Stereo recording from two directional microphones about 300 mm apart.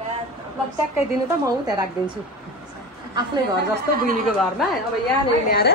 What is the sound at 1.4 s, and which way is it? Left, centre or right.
Speech, centre.